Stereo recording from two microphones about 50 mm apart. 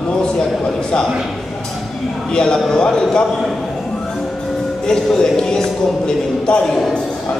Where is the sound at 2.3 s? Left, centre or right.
Centre.